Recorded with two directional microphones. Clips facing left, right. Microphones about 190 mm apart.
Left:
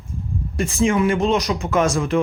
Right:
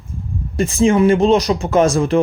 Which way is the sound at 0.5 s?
30° right (ahead or behind).